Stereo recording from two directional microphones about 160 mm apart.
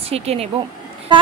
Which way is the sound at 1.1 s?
30° right (ahead or behind).